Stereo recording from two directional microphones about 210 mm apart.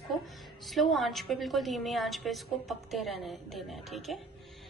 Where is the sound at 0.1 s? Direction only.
Centre (ahead or behind).